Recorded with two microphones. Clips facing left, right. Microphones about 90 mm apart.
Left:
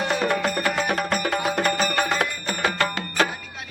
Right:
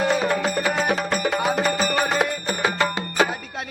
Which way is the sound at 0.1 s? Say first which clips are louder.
Right 1 dB; 5° right (ahead or behind).